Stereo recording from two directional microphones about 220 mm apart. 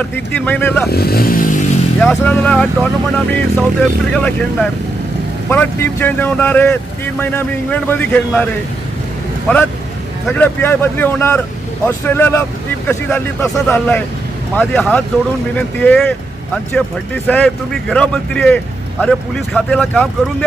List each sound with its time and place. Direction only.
0.1 s speech: 10° left (ahead or behind)
0.8 s speech: 45° left (ahead or behind)
2.0 s speech: 5° left (ahead or behind)
10.2 s speech: 5° left (ahead or behind)